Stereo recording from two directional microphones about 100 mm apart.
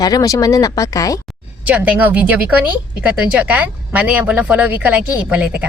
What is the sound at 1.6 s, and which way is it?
A woman's voice, 15° right (ahead or behind).